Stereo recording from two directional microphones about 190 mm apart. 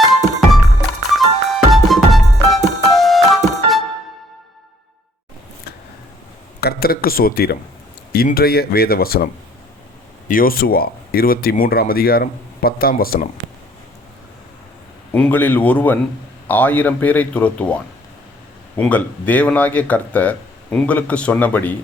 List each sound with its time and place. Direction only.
1.1 s music: centre (ahead or behind)
6.6 s speech: 55° left (ahead or behind)
15.1 s speech: 10° left (ahead or behind)
18.8 s speech: 5° left (ahead or behind)